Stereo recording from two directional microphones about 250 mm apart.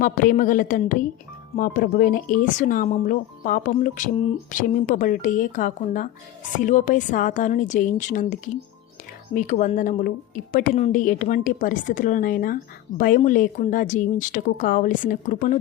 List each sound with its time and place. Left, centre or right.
0.0 s speech: left